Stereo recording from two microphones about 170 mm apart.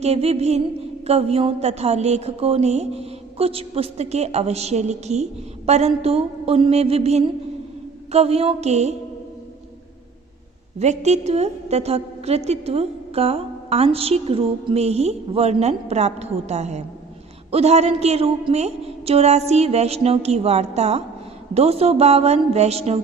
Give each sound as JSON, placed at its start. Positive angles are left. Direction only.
{"t": 0.0, "sound": "a woman's voice", "side_deg": -40}
{"t": 10.8, "sound": "a woman's voice", "side_deg": -40}